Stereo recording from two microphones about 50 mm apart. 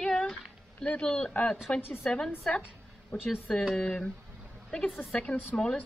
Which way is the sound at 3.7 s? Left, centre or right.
Centre.